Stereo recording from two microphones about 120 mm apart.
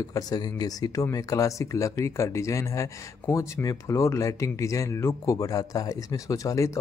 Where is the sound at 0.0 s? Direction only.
30° left (ahead or behind).